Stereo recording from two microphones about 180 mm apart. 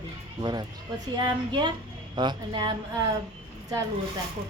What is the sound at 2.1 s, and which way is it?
Speech, 25° right (ahead or behind).